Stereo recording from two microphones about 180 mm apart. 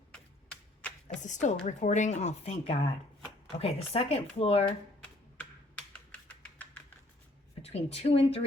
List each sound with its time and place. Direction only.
1.2 s a woman's voice: 45° left (ahead or behind)
5.0 s typing: 5° left (ahead or behind)
7.6 s speech: 35° left (ahead or behind)